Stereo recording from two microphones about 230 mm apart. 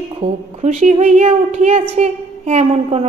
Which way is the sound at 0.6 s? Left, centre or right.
Right.